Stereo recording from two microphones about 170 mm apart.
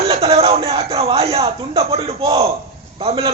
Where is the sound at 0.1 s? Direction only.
35° right (ahead or behind).